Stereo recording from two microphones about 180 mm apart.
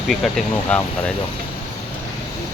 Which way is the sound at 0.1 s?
5° left (ahead or behind).